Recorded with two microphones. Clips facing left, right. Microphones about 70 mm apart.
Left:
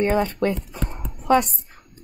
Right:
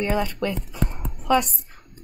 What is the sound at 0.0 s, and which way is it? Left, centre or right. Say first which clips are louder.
A woman's voice: left 4 dB; left.